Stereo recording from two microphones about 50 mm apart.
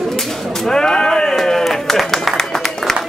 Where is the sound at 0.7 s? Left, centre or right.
Centre.